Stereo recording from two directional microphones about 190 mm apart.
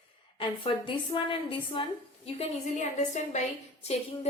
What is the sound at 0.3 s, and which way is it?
A woman's voice, 25° left (ahead or behind).